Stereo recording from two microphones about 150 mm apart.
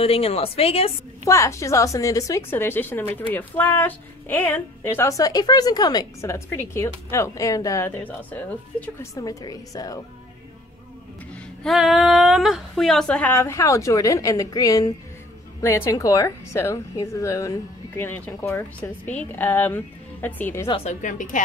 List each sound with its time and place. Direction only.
0.0 s a woman's voice: 40° left (ahead or behind)
1.2 s a woman's voice: 20° left (ahead or behind)
9.1 s a woman's voice: 25° left (ahead or behind)
11.6 s a woman's voice: centre (ahead or behind)
20.8 s speech: 60° left (ahead or behind)